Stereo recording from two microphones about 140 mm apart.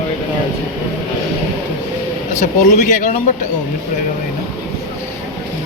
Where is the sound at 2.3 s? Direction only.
60° left (ahead or behind).